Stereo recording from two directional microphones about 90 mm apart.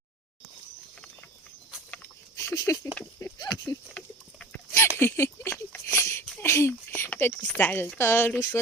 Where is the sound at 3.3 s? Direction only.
45° left (ahead or behind).